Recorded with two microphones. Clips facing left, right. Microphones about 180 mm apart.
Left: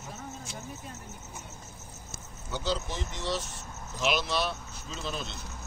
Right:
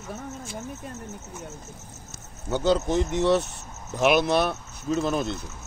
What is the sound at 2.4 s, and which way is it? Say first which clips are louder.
A man's voice: right 10 dB; 55° right (ahead or behind).